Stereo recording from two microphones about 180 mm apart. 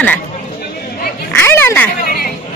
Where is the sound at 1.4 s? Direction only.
10° left (ahead or behind).